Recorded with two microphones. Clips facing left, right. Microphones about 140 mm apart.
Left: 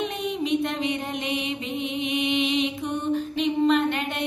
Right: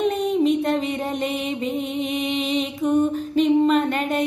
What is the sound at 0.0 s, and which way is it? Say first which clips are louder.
Mantra: right 8 dB; 40° right (ahead or behind).